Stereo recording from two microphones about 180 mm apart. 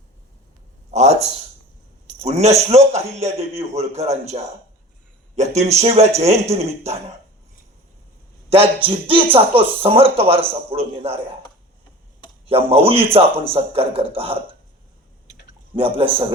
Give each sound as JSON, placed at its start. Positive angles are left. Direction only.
{"t": 0.9, "sound": "a sound", "side_deg": -40}
{"t": 2.2, "sound": "speech", "side_deg": -40}
{"t": 5.4, "sound": "speech", "side_deg": -35}
{"t": 8.4, "sound": "speech", "side_deg": -30}
{"t": 12.5, "sound": "speech", "side_deg": -35}
{"t": 15.7, "sound": "a man's voice", "side_deg": -30}